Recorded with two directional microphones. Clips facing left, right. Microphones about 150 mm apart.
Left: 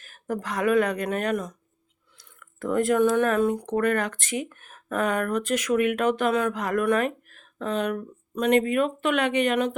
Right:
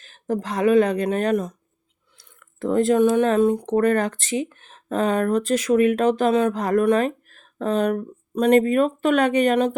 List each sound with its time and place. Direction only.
0.0 s speech: 25° right (ahead or behind)